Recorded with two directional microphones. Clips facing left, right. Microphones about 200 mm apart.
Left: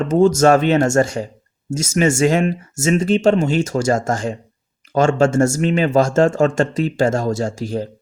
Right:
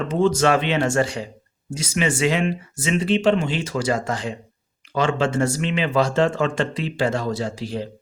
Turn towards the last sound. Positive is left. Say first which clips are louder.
# left 4 dB
turn(degrees=45)  # may be behind; listen again after turning